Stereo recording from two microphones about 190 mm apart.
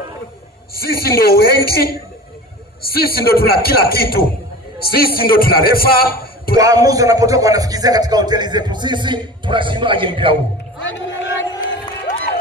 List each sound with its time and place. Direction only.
0.7 s a man's voice: 55° left (ahead or behind)
2.8 s a man's voice: 55° left (ahead or behind)
6.5 s speech: 20° right (ahead or behind)
10.8 s a sound: 80° left